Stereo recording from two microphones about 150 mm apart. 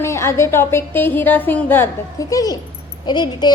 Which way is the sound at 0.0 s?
15° left (ahead or behind).